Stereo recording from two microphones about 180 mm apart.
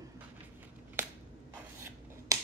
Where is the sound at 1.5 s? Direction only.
15° right (ahead or behind).